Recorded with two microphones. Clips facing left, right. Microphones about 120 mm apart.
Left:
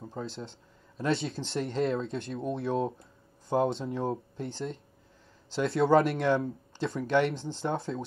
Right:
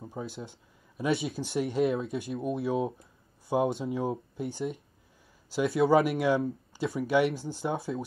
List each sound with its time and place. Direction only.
0.2 s speech: 10° right (ahead or behind)